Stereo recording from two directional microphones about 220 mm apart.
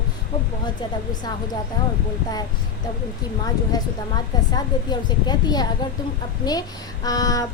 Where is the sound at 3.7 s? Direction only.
15° left (ahead or behind).